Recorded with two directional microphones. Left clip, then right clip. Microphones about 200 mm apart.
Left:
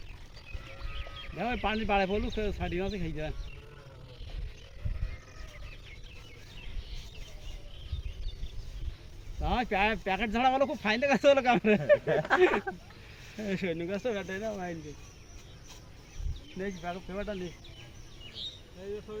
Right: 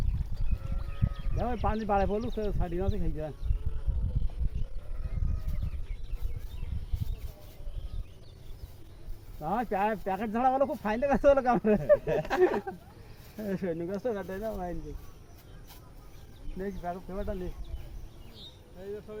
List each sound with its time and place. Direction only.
1.4 s speech: 30° left (ahead or behind)
9.4 s speech: 30° left (ahead or behind)
16.6 s speech: 30° left (ahead or behind)
19.1 s speech: 10° right (ahead or behind)